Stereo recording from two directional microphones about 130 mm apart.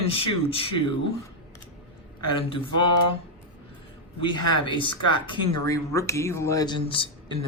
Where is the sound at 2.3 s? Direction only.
40° left (ahead or behind).